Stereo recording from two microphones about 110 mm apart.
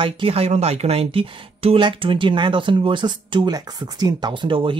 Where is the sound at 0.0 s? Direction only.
60° right (ahead or behind).